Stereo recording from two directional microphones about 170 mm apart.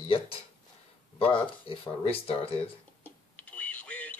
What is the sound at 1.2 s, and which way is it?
Speech, 35° left (ahead or behind).